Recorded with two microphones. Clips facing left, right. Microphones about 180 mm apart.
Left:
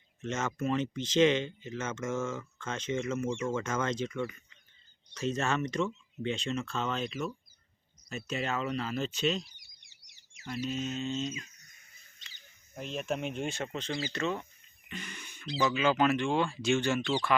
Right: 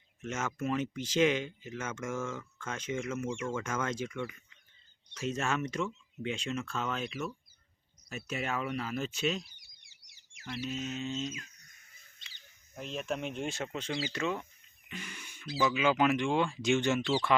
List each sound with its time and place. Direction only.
0.2 s speech: 10° right (ahead or behind)
2.2 s speech: 5° left (ahead or behind)
2.6 s speech: 10° right (ahead or behind)
10.5 s speech: 5° right (ahead or behind)
12.8 s speech: centre (ahead or behind); by 17.0 s 20° right (ahead or behind)